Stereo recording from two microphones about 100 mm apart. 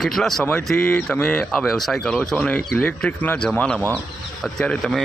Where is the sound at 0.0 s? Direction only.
Centre (ahead or behind).